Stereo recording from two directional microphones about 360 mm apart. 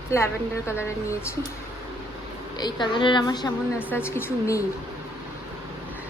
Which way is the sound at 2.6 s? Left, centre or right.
Centre.